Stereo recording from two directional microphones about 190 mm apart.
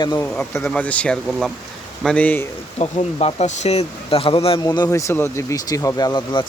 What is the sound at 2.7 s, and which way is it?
Speech, 30° left (ahead or behind).